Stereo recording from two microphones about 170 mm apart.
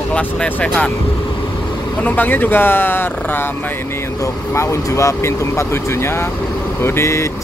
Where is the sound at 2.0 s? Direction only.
10° left (ahead or behind).